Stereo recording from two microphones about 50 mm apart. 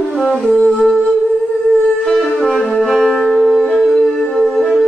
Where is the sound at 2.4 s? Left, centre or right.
Centre.